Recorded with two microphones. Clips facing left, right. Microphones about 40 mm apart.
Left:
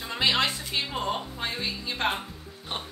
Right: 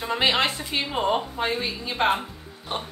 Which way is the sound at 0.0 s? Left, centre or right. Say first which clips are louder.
Right 3 dB; right.